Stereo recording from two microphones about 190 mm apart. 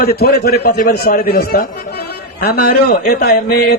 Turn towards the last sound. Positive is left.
turn(degrees=55)  # may be behind; listen again after turning